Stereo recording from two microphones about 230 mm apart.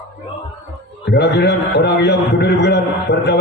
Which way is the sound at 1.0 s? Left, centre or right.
Left.